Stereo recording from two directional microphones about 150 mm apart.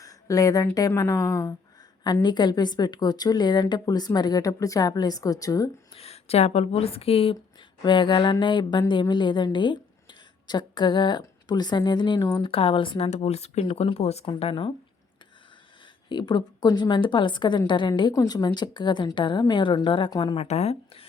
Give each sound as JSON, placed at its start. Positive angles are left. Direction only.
{"t": 0.0, "sound": "speech", "side_deg": 25}
{"t": 5.9, "sound": "a woman's voice", "side_deg": 45}
{"t": 12.5, "sound": "a woman's voice", "side_deg": 40}
{"t": 16.0, "sound": "a woman's voice", "side_deg": 30}